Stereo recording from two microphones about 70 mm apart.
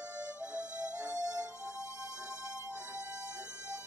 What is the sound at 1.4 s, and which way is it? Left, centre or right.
Music, right.